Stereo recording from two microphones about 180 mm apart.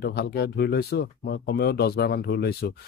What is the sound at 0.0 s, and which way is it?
Speech, 60° left (ahead or behind).